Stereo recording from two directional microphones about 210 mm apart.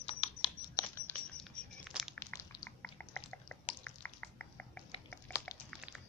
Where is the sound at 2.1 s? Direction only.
10° left (ahead or behind).